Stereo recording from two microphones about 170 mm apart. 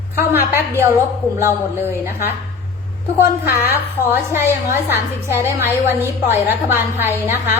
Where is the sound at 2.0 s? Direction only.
15° right (ahead or behind).